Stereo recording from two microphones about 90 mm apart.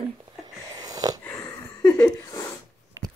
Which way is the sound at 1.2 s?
25° left (ahead or behind).